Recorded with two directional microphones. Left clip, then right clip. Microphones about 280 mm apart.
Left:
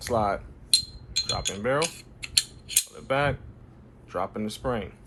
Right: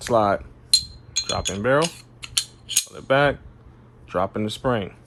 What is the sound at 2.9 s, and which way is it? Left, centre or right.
Speech, right.